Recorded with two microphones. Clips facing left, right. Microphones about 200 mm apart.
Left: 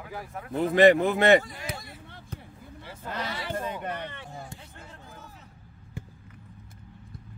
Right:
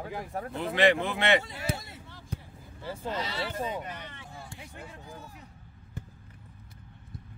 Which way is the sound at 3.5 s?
60° left (ahead or behind).